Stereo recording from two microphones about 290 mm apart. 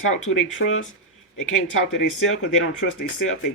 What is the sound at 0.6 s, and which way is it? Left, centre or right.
Speech, left.